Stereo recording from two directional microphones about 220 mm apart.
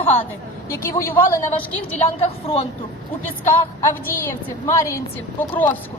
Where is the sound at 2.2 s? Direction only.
25° left (ahead or behind).